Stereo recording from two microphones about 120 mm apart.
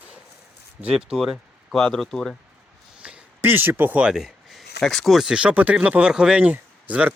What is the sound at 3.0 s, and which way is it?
Speech, 10° right (ahead or behind).